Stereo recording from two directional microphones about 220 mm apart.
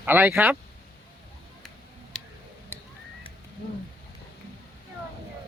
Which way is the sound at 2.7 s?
10° left (ahead or behind).